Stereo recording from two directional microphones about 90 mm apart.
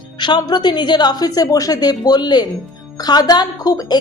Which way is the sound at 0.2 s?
55° left (ahead or behind).